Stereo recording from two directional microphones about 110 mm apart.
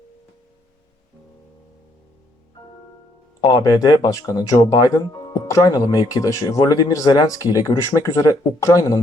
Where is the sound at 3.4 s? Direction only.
40° left (ahead or behind).